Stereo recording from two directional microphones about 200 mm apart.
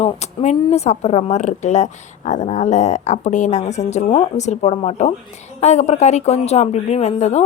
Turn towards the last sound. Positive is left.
turn(degrees=35)  # may be behind; listen again after turning